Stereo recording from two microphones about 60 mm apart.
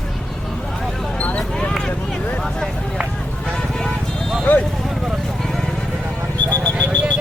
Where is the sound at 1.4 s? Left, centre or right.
Centre.